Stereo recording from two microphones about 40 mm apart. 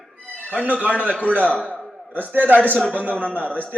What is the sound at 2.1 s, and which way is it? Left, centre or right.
A man's voice, right.